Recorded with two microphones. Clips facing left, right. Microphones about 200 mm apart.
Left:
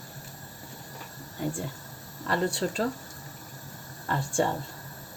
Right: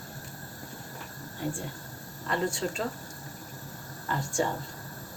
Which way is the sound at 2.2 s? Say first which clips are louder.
Left 2 dB; 35° left (ahead or behind).